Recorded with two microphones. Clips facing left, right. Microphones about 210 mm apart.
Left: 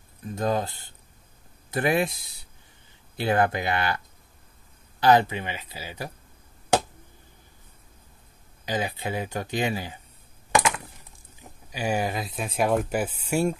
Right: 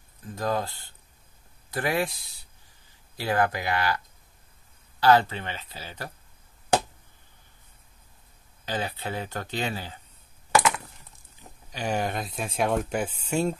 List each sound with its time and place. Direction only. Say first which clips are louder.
0.2 s speech: left 2 dB; 25° left (ahead or behind)
5.0 s speech: left 1 dB; 15° left (ahead or behind)
8.6 s speech: left 3 dB; 15° left (ahead or behind)
11.7 s speech: left 2 dB; 10° left (ahead or behind)